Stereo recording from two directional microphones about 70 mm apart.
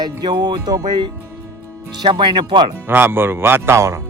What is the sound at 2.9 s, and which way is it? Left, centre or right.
Speech, right.